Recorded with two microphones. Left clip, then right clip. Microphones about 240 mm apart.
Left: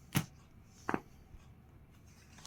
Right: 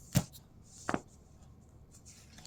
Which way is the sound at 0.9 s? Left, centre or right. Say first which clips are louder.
Right 1 dB; centre.